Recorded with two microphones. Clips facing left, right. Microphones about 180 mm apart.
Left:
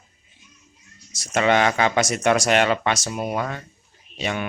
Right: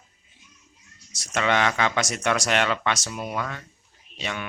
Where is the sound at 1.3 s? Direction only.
40° left (ahead or behind).